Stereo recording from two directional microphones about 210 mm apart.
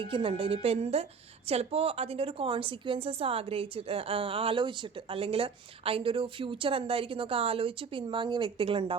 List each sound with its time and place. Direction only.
0.0 s a woman's voice: 25° right (ahead or behind)